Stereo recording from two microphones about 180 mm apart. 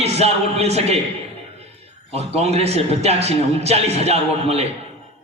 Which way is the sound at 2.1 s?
35° right (ahead or behind).